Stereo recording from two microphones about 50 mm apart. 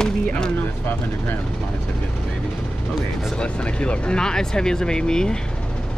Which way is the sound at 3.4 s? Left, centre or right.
Left.